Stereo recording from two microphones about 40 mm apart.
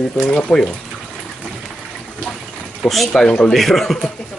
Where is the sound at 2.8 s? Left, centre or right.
Centre.